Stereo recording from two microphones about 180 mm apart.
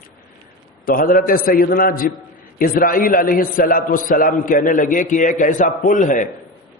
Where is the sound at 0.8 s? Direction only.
50° left (ahead or behind).